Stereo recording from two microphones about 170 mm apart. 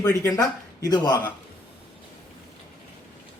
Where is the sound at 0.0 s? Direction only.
15° left (ahead or behind).